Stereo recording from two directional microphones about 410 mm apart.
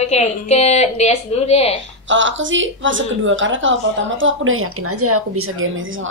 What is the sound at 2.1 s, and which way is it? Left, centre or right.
A woman's voice, right.